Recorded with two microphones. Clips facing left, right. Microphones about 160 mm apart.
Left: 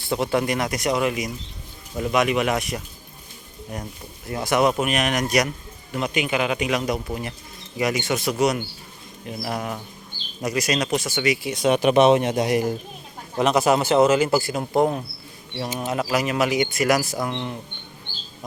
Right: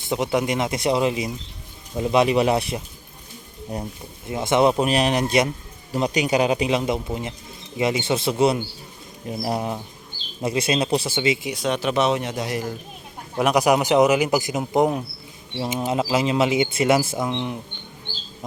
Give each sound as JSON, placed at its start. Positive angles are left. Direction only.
{"t": 0.0, "sound": "a man's voice", "side_deg": -15}
{"t": 4.3, "sound": "a man's voice", "side_deg": -20}
{"t": 11.7, "sound": "speech", "side_deg": 15}
{"t": 13.3, "sound": "a man's voice", "side_deg": -10}